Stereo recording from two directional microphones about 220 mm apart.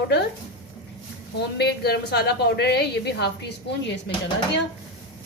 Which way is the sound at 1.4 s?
50° left (ahead or behind).